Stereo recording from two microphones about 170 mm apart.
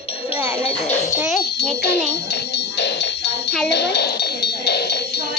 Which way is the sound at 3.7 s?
80° left.